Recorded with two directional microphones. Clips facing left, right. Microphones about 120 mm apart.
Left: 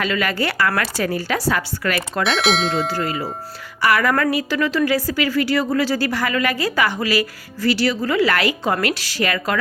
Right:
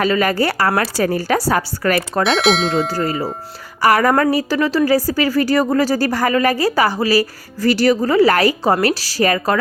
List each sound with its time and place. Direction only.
0.0 s a woman's voice: 40° right (ahead or behind)
2.2 s speech: centre (ahead or behind)
2.9 s a woman's voice: 35° right (ahead or behind)